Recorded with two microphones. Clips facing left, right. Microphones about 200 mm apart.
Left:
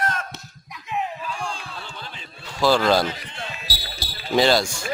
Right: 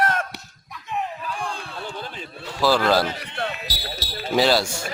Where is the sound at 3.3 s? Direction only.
60° right (ahead or behind).